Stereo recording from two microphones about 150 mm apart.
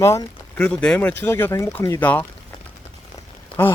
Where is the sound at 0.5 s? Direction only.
5° left (ahead or behind).